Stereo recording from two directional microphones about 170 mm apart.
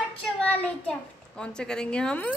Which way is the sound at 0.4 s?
10° left (ahead or behind).